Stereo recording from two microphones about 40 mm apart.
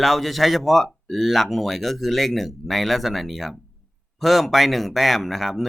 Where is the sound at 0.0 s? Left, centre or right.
Centre.